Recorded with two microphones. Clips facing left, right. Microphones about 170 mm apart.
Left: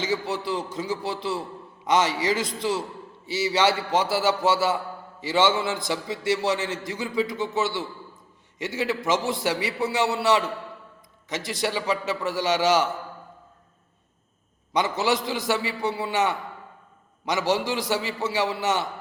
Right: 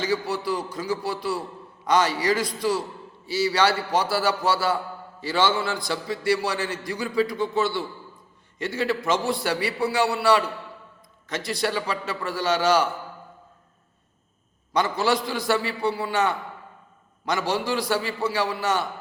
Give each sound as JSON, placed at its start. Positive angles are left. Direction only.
{"t": 0.0, "sound": "a man's voice", "side_deg": 20}
{"t": 14.7, "sound": "a man's voice", "side_deg": 20}